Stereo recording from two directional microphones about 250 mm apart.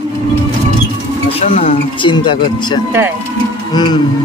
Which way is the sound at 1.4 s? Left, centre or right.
Left.